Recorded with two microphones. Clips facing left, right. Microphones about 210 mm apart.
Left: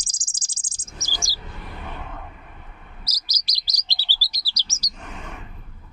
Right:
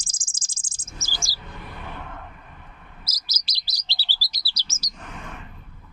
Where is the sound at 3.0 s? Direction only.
40° left (ahead or behind).